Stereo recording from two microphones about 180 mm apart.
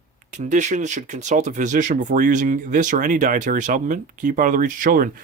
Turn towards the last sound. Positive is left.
turn(degrees=-50)  # may be behind; listen again after turning